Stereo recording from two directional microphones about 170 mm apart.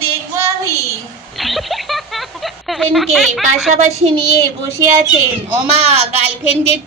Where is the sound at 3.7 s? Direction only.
40° right (ahead or behind).